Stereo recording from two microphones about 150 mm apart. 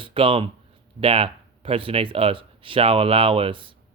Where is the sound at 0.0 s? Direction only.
35° right (ahead or behind).